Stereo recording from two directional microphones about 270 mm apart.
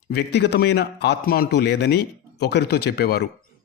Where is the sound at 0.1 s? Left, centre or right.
Left.